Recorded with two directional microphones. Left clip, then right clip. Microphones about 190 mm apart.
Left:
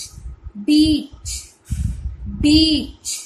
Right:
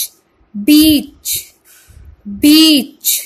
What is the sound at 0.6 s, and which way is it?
Speech, 55° right (ahead or behind).